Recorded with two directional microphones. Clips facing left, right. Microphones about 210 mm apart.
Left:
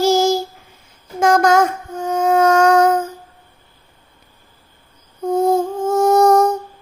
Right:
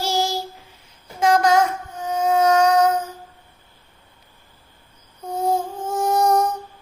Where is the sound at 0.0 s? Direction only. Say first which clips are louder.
Left 9 dB; 45° left (ahead or behind).